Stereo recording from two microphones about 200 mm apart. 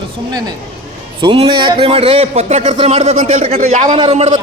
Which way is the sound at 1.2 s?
25° right (ahead or behind).